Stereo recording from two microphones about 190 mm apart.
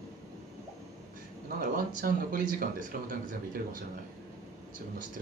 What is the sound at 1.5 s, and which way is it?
Speech, 50° right (ahead or behind).